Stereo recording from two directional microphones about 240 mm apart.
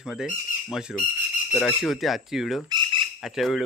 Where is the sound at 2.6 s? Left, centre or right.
Centre.